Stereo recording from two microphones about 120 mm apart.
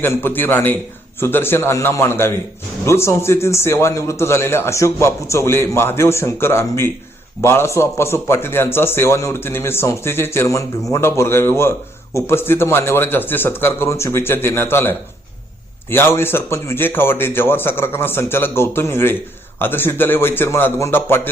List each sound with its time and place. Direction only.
0.0 s a man's voice: 20° left (ahead or behind)